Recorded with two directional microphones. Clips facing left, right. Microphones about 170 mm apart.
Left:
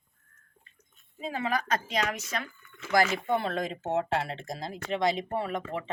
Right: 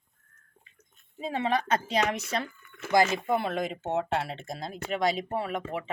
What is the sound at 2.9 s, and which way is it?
Speech, 20° right (ahead or behind).